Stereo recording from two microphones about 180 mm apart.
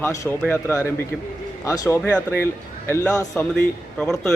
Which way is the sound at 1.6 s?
20° left (ahead or behind).